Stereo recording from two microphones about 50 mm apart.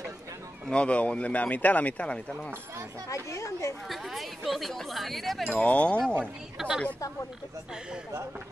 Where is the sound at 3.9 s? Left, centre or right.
Centre.